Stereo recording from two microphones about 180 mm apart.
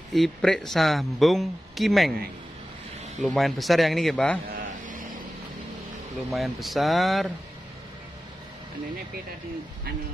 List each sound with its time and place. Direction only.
0.1 s speech: centre (ahead or behind)
3.3 s speech: centre (ahead or behind)
4.6 s vehicle: 50° right (ahead or behind)
6.3 s speech: centre (ahead or behind)